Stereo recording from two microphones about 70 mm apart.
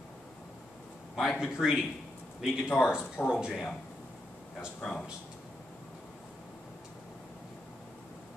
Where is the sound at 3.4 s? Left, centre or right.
Centre.